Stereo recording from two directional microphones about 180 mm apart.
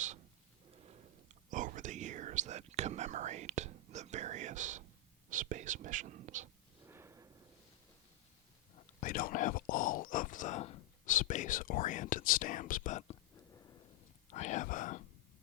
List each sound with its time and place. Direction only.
1.5 s whispering: 45° right (ahead or behind)
5.3 s speech: 45° right (ahead or behind)
6.8 s a sound: 15° right (ahead or behind)
9.0 s speech: 50° left (ahead or behind)
14.3 s speech: 40° left (ahead or behind)